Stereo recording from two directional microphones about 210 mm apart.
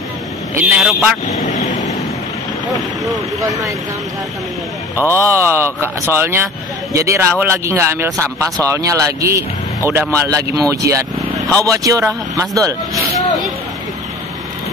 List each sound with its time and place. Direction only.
0.6 s speech: 5° right (ahead or behind)
1.3 s vehicle: 35° left (ahead or behind)
3.3 s speech: 15° right (ahead or behind)
5.1 s speech: 10° right (ahead or behind)